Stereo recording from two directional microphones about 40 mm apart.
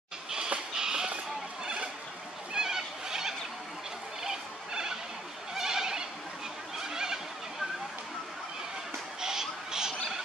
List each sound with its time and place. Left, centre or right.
0.7 s a sound: centre
2.5 s neigh: centre
4.2 s a sound: centre
5.5 s goat: centre
6.8 s neigh: centre
9.2 s music: centre